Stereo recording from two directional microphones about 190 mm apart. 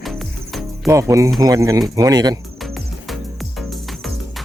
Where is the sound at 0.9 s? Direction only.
15° right (ahead or behind).